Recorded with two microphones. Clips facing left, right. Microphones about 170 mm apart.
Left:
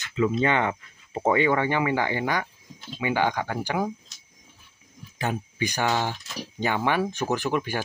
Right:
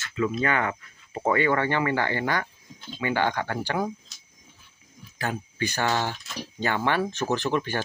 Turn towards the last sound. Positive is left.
turn(degrees=10)  # may be behind; listen again after turning